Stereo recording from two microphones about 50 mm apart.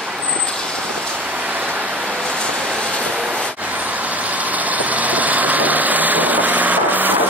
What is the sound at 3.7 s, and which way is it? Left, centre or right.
Vehicle, right.